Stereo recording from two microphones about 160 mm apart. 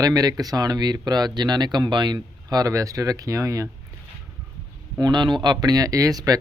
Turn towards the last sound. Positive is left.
turn(degrees=-20)  # may be behind; listen again after turning